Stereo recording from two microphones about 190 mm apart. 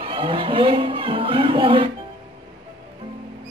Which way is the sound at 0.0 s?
25° right (ahead or behind).